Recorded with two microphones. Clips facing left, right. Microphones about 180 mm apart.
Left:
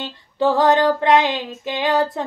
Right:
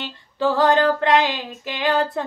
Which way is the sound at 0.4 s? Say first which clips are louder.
Left 2 dB; 20° left (ahead or behind).